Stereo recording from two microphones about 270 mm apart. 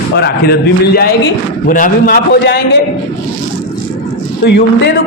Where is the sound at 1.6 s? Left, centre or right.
Left.